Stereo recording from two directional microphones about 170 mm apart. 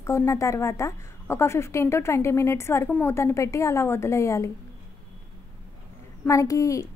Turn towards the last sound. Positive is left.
turn(degrees=20)  # may be behind; listen again after turning